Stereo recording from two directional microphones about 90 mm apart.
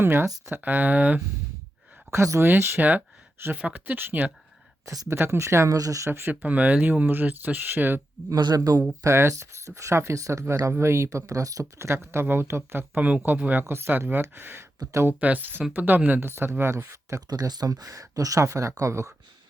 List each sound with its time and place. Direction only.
0.0 s speech: 25° right (ahead or behind)
2.1 s speech: 30° right (ahead or behind)
4.9 s speech: 40° right (ahead or behind)
5.1 s speech: 25° right (ahead or behind)
5.6 s speech: 40° right (ahead or behind)
6.1 s speech: 25° right (ahead or behind)
8.4 s speech: 50° right (ahead or behind)
9.0 s speech: 30° right (ahead or behind)
14.8 s speech: 45° right (ahead or behind)
15.2 s speech: 20° right (ahead or behind); by 17.2 s 35° right (ahead or behind)
17.2 s speech: 50° right (ahead or behind)